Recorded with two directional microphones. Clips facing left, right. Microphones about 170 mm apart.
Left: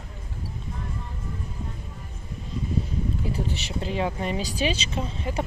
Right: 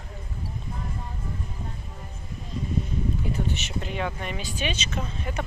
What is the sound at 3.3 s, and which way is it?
Speech, 35° left (ahead or behind).